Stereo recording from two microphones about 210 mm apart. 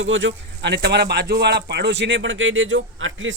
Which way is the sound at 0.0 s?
65° right (ahead or behind).